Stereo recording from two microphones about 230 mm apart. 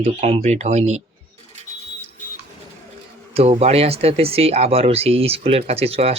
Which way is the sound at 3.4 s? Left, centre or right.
Right.